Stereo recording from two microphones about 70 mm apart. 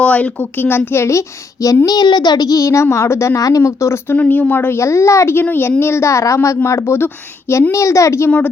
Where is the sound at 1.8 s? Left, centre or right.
Left.